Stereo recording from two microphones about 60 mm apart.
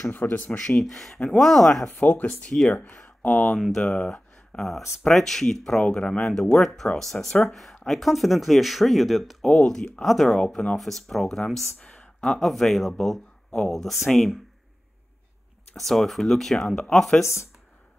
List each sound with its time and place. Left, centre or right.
0.1 s speech: left
0.5 s speech: centre
0.7 s speech: centre
2.0 s speech: left
2.7 s speech: centre
3.7 s speech: centre
9.5 s speech: centre
10.0 s speech: centre
11.8 s a sound: left
12.2 s speech: centre
15.7 s speech: centre
17.2 s speech: left